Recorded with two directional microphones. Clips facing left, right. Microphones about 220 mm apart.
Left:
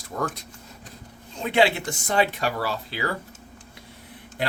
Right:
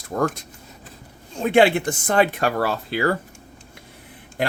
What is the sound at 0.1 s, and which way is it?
Speech, 50° right (ahead or behind).